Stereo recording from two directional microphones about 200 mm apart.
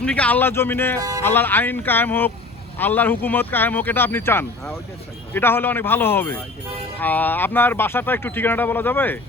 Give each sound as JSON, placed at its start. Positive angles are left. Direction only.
{"t": 0.0, "sound": "speech", "side_deg": 5}
{"t": 0.9, "sound": "speech", "side_deg": -15}
{"t": 1.2, "sound": "speech", "side_deg": 10}